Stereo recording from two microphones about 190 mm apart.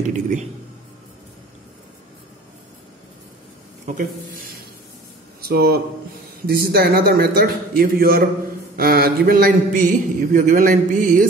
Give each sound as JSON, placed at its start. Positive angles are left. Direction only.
{"t": 3.8, "sound": "a man's voice", "side_deg": -45}